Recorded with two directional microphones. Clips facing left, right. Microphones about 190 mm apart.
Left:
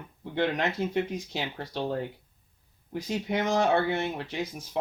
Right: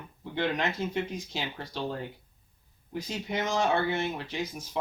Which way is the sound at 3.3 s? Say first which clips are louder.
Left 3 dB; 55° left (ahead or behind).